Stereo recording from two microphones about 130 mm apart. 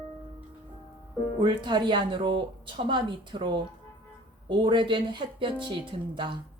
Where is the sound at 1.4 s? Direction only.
40° right (ahead or behind).